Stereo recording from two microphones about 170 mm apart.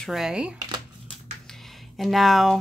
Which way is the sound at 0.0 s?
Centre (ahead or behind).